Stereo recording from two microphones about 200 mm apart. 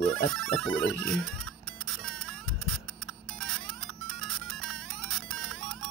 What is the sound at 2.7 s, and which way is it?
Alarm clock, centre (ahead or behind).